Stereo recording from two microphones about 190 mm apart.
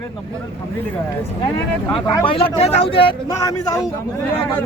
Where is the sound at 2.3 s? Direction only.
30° left (ahead or behind).